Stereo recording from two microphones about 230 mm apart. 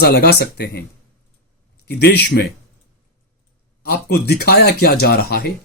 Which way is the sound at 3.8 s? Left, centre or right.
Left.